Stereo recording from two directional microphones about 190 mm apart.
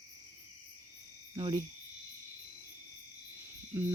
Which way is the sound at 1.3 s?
25° right (ahead or behind).